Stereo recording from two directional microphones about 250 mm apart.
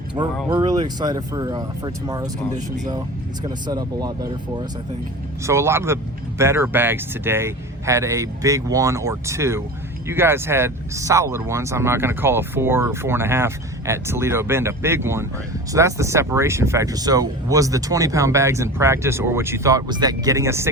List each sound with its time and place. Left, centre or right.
0.2 s speech: centre
3.4 s speech: centre